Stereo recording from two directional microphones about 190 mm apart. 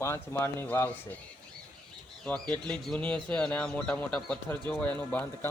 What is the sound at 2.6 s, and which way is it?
Speech, 5° left (ahead or behind).